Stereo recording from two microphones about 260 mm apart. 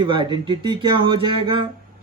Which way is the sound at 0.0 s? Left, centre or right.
Centre.